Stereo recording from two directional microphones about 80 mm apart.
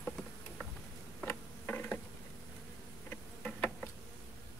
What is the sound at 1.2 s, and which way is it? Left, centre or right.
Insect, centre.